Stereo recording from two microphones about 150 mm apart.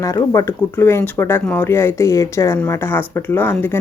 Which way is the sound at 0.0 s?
20° left (ahead or behind).